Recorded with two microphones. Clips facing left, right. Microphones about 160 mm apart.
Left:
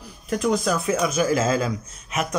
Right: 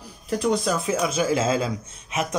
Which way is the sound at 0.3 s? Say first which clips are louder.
Left 1 dB; 30° right (ahead or behind).